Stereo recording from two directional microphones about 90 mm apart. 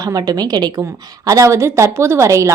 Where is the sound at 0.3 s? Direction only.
50° right (ahead or behind).